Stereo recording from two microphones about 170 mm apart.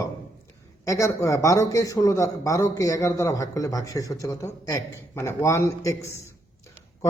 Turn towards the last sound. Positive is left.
turn(degrees=15)  # may be behind; listen again after turning